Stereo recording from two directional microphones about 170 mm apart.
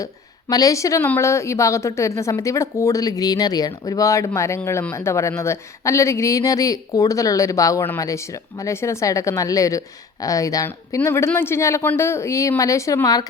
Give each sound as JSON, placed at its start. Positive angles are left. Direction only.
{"t": 0.0, "sound": "a woman's voice", "side_deg": 20}